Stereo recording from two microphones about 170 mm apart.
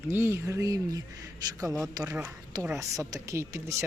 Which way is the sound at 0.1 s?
15° right (ahead or behind).